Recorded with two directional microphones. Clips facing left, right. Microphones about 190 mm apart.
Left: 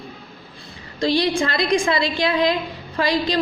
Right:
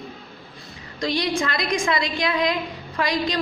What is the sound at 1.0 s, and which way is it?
A woman's voice, 30° left (ahead or behind).